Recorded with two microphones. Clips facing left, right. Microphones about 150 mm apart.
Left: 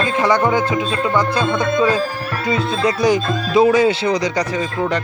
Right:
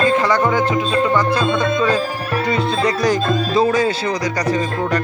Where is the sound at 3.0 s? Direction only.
10° left (ahead or behind).